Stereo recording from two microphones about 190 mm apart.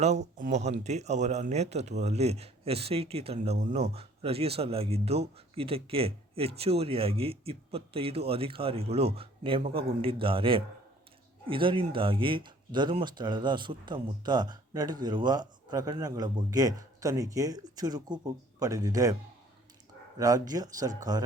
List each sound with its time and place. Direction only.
0.0 s a man's voice: 40° right (ahead or behind); by 19.1 s 20° right (ahead or behind)
20.1 s a man's voice: 20° right (ahead or behind)